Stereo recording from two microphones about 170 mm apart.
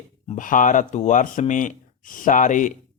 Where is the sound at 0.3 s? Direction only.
50° left (ahead or behind).